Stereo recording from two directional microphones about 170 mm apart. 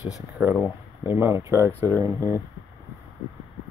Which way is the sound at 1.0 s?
15° right (ahead or behind).